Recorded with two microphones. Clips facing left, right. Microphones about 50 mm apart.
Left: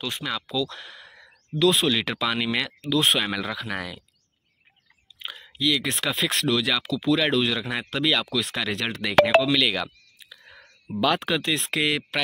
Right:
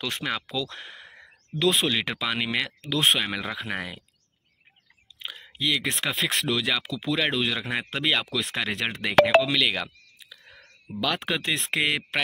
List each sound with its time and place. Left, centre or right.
0.5 s a sound: right
1.8 s speech: centre
3.4 s speech: right
5.6 s speech: centre
9.2 s speech: centre
10.9 s speech: centre
11.1 s speech: centre